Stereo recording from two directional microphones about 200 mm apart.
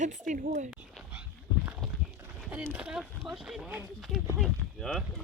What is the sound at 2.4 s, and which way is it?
Speech, 5° right (ahead or behind).